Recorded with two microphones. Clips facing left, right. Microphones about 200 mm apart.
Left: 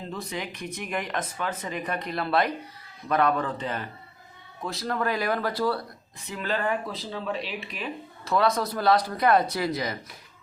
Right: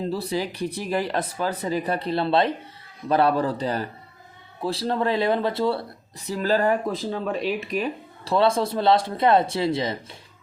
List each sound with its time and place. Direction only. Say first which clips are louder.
0.1 s speech: right 7 dB; 35° right (ahead or behind)
6.1 s speech: right 7 dB; 35° right (ahead or behind)